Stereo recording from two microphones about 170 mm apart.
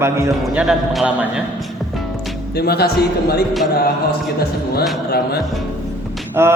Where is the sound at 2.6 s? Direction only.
70° left (ahead or behind).